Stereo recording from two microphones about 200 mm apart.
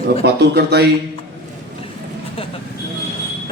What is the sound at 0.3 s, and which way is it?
Speech, 55° right (ahead or behind).